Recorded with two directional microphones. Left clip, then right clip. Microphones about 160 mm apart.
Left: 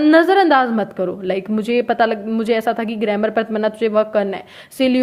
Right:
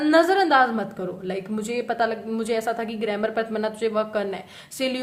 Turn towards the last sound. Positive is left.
turn(degrees=40)  # may be behind; listen again after turning